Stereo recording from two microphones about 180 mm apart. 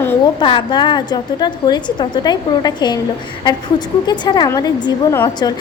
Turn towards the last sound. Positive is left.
turn(degrees=25)  # may be behind; listen again after turning